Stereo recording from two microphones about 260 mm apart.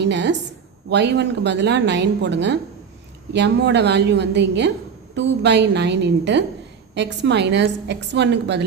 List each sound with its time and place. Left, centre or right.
0.0 s a woman's voice: right